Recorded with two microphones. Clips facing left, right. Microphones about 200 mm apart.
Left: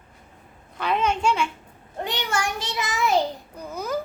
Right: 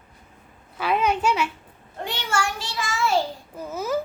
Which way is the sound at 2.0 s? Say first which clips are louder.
Even; 15° left (ahead or behind).